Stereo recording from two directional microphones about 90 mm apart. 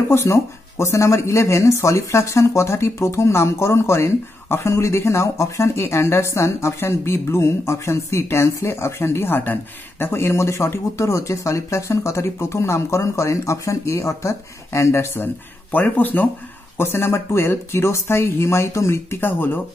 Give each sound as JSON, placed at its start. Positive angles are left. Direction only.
{"t": 0.1, "sound": "speech", "side_deg": 30}
{"t": 15.7, "sound": "speech", "side_deg": 20}